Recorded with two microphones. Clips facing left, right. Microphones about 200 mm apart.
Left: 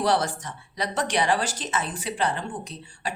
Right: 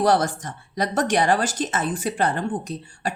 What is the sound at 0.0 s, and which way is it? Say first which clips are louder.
A woman's voice: right 4 dB; 45° right (ahead or behind).